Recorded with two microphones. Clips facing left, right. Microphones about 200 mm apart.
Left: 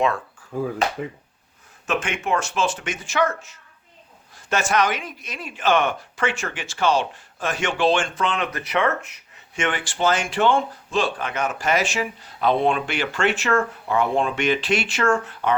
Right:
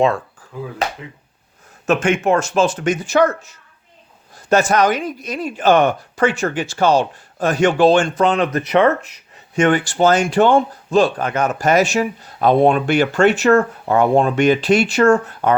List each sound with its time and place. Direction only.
0.5 s speech: 45° left (ahead or behind)
1.9 s speech: 45° right (ahead or behind)